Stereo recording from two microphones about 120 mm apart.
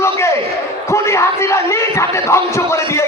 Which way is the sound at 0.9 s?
25° left (ahead or behind).